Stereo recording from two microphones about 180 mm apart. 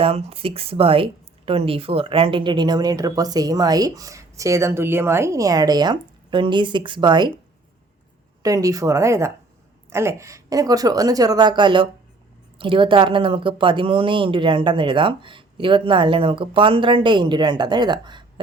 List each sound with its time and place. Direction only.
0.0 s speech: 35° right (ahead or behind)
8.4 s speech: 20° right (ahead or behind)